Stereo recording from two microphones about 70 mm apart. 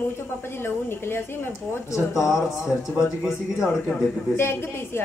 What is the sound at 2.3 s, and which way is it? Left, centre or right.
Speech, centre.